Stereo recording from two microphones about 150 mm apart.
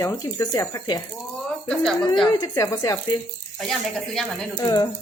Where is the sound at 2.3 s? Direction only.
25° left (ahead or behind).